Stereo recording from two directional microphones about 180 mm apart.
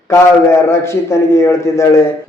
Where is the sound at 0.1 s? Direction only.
15° left (ahead or behind).